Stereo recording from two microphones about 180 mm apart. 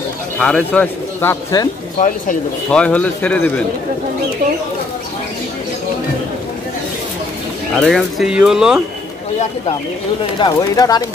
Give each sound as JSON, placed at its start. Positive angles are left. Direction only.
{"t": 0.4, "sound": "a man's voice", "side_deg": 5}
{"t": 2.0, "sound": "speech", "side_deg": 45}
{"t": 2.7, "sound": "a man's voice", "side_deg": 5}
{"t": 7.8, "sound": "speech", "side_deg": -5}
{"t": 10.4, "sound": "speech", "side_deg": 20}